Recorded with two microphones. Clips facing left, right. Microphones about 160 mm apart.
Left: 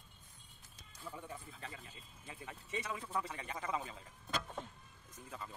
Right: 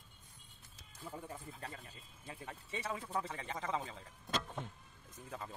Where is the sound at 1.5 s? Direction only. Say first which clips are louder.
Right 2 dB; 45° right (ahead or behind); by 3.8 s 25° right (ahead or behind).